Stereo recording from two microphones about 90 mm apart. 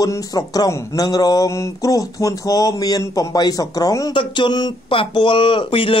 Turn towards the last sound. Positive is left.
turn(degrees=75)  # may be behind; listen again after turning